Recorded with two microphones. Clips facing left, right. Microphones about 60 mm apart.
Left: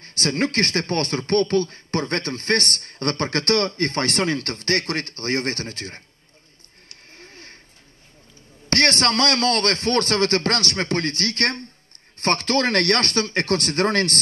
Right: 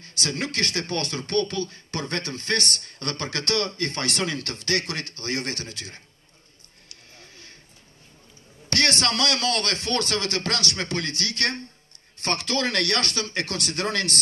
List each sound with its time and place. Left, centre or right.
0.0 s speech: left
6.9 s a sound: left
8.6 s speech: left